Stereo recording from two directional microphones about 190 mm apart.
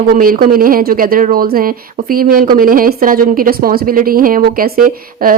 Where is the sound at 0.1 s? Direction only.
50° right (ahead or behind).